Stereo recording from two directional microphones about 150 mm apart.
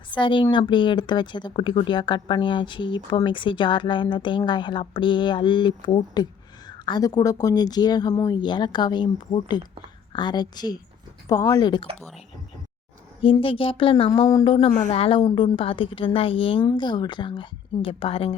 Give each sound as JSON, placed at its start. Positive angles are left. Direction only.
{"t": 0.1, "sound": "speech", "side_deg": 35}
{"t": 13.2, "sound": "speech", "side_deg": 35}
{"t": 14.3, "sound": "speech", "side_deg": 25}
{"t": 14.8, "sound": "speech", "side_deg": 40}